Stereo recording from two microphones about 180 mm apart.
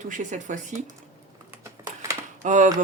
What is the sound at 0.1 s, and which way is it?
Speech, 45° right (ahead or behind).